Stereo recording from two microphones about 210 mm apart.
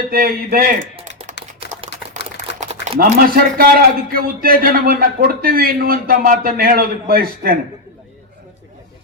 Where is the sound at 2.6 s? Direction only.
35° right (ahead or behind).